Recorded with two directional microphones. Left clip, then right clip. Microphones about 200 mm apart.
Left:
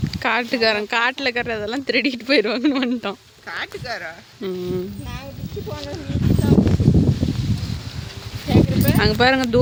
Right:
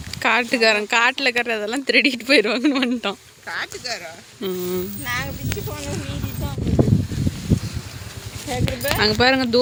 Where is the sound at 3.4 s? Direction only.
60° left (ahead or behind).